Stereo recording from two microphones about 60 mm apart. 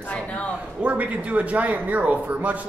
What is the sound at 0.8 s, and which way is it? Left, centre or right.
A man's voice, right.